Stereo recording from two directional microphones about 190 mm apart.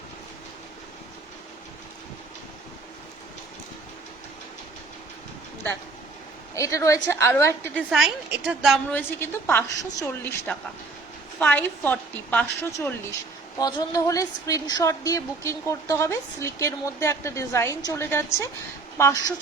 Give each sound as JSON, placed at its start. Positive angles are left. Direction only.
{"t": 6.6, "sound": "a woman's voice", "side_deg": 15}
{"t": 7.8, "sound": "a woman's voice", "side_deg": -5}
{"t": 9.0, "sound": "a woman's voice", "side_deg": 10}
{"t": 13.6, "sound": "a woman's voice", "side_deg": 20}